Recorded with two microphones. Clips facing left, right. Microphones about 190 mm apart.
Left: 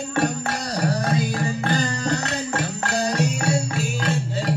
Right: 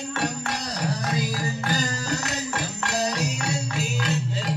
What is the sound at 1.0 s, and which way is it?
Music, 30° left (ahead or behind).